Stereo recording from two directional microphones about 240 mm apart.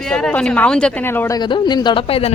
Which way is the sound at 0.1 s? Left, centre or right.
Centre.